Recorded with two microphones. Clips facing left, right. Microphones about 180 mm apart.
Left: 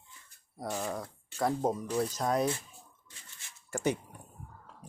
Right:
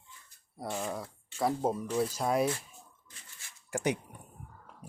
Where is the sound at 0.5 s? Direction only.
Centre (ahead or behind).